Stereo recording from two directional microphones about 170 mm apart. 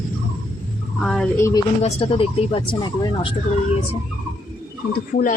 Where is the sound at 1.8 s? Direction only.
35° left (ahead or behind).